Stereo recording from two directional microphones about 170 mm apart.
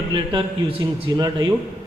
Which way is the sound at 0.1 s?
30° right (ahead or behind).